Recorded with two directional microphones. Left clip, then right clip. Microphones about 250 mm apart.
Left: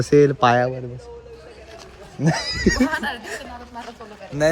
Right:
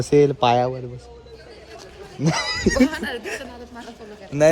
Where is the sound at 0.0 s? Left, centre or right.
Centre.